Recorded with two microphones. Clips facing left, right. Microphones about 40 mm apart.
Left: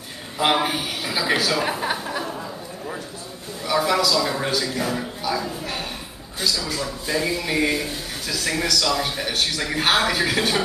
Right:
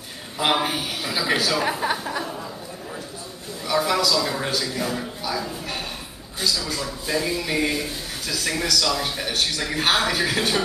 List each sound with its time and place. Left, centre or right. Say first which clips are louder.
0.4 s a man's voice: left 1 dB; centre
3.6 s a man's voice: left 1 dB; centre